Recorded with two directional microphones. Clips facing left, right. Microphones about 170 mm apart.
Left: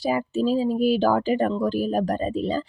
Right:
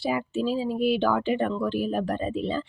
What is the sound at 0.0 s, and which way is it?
Speech, 40° left (ahead or behind).